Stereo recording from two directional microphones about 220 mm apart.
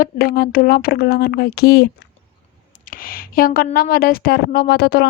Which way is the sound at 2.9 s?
40° left (ahead or behind).